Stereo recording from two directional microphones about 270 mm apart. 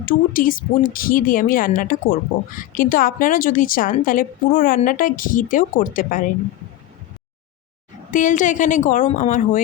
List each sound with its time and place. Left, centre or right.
0.0 s speech: left
8.1 s speech: left